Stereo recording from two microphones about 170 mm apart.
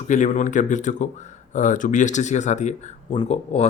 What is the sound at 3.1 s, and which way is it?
Speech, 30° left (ahead or behind).